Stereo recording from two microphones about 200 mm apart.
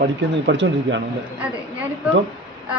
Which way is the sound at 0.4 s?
65° right (ahead or behind).